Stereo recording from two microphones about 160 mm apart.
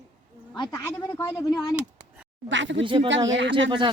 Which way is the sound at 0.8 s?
15° left (ahead or behind).